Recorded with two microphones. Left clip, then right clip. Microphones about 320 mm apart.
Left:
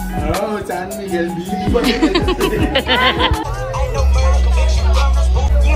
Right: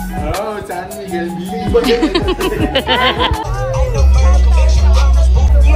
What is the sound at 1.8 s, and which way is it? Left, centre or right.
Speech, centre.